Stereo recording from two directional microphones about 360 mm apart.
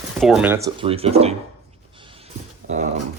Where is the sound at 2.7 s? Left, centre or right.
Centre.